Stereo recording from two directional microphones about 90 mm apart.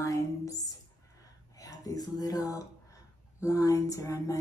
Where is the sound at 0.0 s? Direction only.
40° left (ahead or behind).